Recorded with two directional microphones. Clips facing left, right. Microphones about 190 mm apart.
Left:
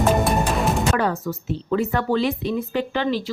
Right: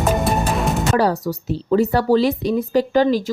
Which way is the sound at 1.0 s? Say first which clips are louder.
Right 5 dB; 35° right (ahead or behind).